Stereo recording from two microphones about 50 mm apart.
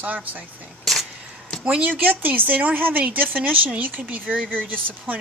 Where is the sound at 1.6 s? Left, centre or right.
Right.